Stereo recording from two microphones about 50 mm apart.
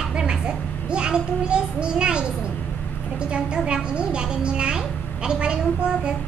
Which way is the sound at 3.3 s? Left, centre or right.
Centre.